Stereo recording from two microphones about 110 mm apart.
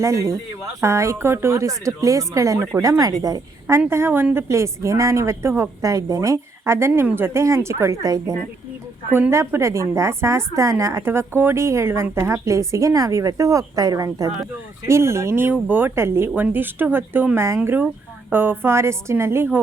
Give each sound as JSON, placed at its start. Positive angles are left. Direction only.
{"t": 0.0, "sound": "a woman's voice", "side_deg": -25}
{"t": 3.0, "sound": "a woman's voice", "side_deg": -35}
{"t": 3.8, "sound": "a woman's voice", "side_deg": -20}
{"t": 9.3, "sound": "a woman's voice", "side_deg": -25}